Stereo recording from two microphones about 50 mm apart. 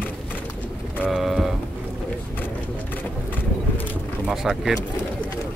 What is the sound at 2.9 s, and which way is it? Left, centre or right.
Vehicle, left.